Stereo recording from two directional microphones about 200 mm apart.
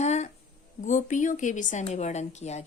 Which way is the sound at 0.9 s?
40° left (ahead or behind).